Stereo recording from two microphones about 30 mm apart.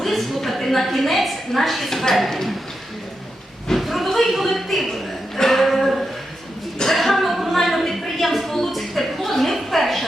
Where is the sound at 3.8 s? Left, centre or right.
Centre.